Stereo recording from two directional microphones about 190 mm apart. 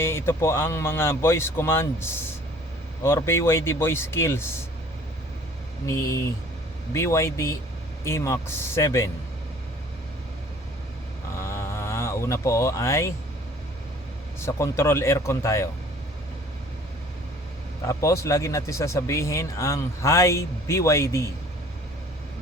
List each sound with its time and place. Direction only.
0.0 s speech: 15° left (ahead or behind)
5.8 s speech: 15° left (ahead or behind)
11.3 s a sound: 15° left (ahead or behind)
14.4 s speech: 15° left (ahead or behind)
17.8 s speech: 15° left (ahead or behind)